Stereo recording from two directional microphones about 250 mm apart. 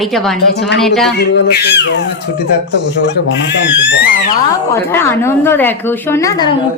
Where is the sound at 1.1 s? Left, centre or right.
Left.